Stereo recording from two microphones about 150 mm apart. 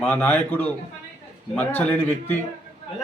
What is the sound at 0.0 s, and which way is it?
A man's voice, 10° left (ahead or behind).